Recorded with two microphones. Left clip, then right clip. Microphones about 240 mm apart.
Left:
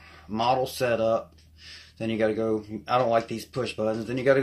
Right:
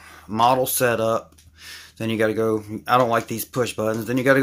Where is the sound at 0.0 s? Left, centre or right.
Right.